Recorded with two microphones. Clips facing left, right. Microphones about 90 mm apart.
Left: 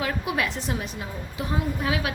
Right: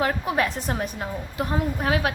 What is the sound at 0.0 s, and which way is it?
A woman's voice, 40° right (ahead or behind).